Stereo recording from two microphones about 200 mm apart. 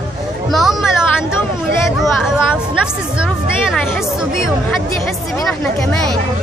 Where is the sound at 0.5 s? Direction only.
Centre (ahead or behind).